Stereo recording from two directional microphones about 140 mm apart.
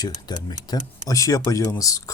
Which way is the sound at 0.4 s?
30° left (ahead or behind).